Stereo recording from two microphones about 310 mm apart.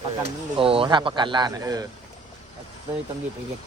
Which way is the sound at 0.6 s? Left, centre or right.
Centre.